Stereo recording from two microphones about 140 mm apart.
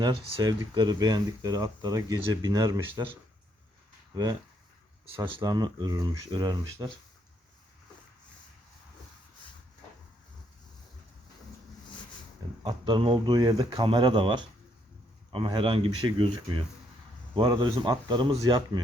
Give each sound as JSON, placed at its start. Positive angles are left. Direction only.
{"t": 0.0, "sound": "speech", "side_deg": -40}
{"t": 4.1, "sound": "speech", "side_deg": -25}
{"t": 12.6, "sound": "speech", "side_deg": -35}